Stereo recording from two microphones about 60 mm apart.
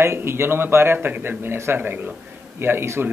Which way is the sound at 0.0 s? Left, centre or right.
Right.